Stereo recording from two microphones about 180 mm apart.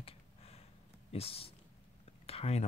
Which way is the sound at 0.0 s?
35° left (ahead or behind).